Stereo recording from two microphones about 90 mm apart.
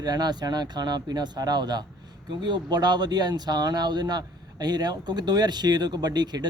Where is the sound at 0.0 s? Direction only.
50° right (ahead or behind).